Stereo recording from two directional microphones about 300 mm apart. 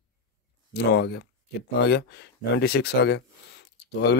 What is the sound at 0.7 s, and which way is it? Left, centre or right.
Speech, left.